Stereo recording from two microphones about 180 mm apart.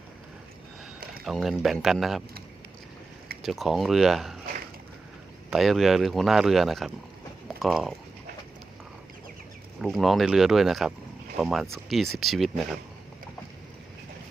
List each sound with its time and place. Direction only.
1.2 s speech: centre (ahead or behind)
3.4 s speech: centre (ahead or behind)
5.5 s speech: centre (ahead or behind)
9.8 s speech: centre (ahead or behind)